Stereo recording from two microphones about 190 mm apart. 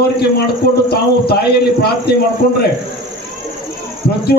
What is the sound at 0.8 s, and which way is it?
A man's voice, 55° left (ahead or behind).